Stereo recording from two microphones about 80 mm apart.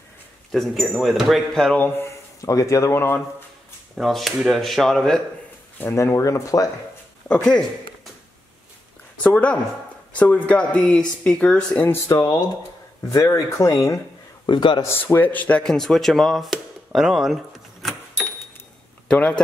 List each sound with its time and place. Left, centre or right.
0.5 s speech: centre
1.8 s speech: left
2.4 s speech: left
3.0 s speech: left
4.0 s speech: centre
5.9 s speech: left
7.4 s speech: centre
9.2 s speech: centre
12.1 s speech: left
14.4 s a man's voice: left
15.0 s speech: left
15.6 s speech: centre
19.1 s speech: centre